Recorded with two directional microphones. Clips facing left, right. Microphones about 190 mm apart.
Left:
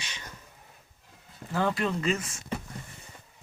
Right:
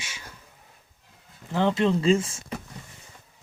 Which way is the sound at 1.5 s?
20° right (ahead or behind).